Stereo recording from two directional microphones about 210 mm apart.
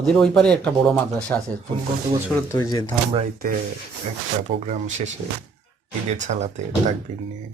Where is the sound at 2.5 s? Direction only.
15° left (ahead or behind).